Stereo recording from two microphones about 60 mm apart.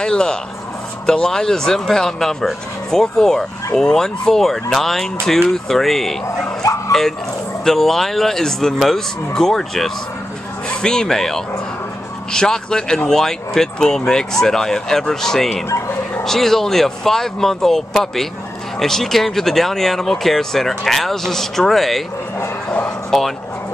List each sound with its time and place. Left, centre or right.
0.0 s speech: centre
6.9 s dog: centre
7.6 s speech: centre
23.1 s speech: centre